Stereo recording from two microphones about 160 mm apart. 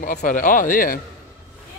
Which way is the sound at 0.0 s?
55° left (ahead or behind).